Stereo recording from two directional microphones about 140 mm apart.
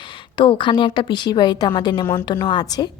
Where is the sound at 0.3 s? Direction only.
35° left (ahead or behind).